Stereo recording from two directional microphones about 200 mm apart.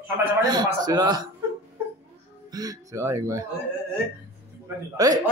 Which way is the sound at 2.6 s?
15° right (ahead or behind).